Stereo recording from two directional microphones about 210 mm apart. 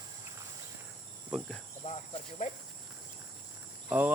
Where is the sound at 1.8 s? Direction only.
35° left (ahead or behind).